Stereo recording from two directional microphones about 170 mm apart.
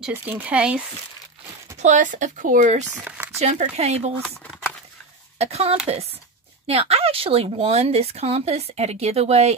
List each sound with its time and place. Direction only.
0.0 s speech: 10° right (ahead or behind)
1.8 s speech: 45° right (ahead or behind)
3.0 s a sound: 10° right (ahead or behind)
3.3 s speech: 40° right (ahead or behind)
5.4 s speech: 35° right (ahead or behind)